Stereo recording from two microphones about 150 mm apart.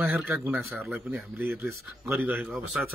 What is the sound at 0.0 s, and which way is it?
Speech, 5° right (ahead or behind).